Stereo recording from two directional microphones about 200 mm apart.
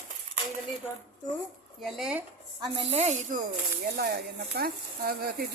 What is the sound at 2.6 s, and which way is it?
Speech, 30° right (ahead or behind).